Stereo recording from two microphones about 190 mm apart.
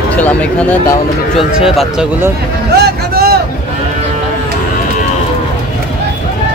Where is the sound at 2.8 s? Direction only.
55° right (ahead or behind).